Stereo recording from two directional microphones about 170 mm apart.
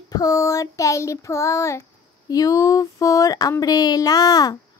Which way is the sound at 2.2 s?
20° left (ahead or behind).